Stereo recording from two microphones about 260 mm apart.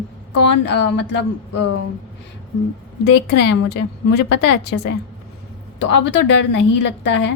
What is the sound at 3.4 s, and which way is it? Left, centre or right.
A woman's voice, left.